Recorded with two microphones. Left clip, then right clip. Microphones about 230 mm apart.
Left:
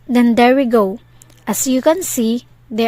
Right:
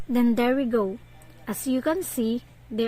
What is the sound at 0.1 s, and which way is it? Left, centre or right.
A woman's voice, left.